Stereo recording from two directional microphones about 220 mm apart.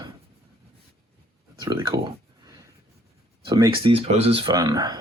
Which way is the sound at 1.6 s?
20° right (ahead or behind).